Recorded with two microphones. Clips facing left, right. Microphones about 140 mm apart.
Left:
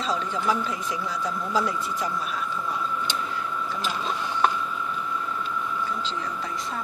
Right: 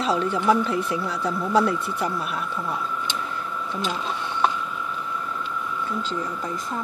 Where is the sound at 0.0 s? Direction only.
60° right (ahead or behind).